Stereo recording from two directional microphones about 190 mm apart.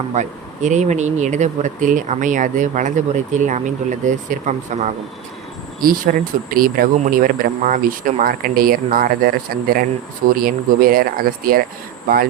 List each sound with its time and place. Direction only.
0.1 s speech: 40° right (ahead or behind)